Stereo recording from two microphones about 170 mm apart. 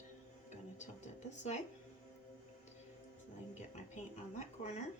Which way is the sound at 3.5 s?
45° left (ahead or behind).